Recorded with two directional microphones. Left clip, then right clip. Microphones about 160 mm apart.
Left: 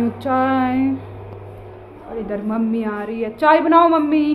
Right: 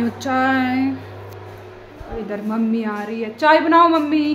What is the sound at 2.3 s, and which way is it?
A woman's voice, 20° right (ahead or behind).